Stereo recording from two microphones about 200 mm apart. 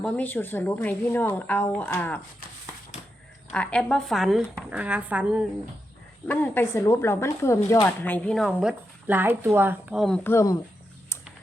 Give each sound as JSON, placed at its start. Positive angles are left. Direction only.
{"t": 0.0, "sound": "speech", "side_deg": 10}
{"t": 3.5, "sound": "a woman's voice", "side_deg": 5}
{"t": 6.2, "sound": "speech", "side_deg": 10}
{"t": 10.2, "sound": "speech", "side_deg": 15}